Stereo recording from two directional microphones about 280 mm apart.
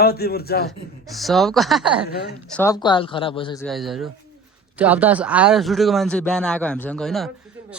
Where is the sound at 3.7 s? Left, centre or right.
Centre.